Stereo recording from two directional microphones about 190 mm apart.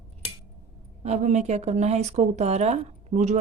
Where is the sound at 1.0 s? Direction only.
35° right (ahead or behind).